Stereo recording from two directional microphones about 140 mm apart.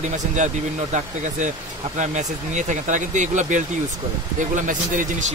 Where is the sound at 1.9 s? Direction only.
60° right (ahead or behind).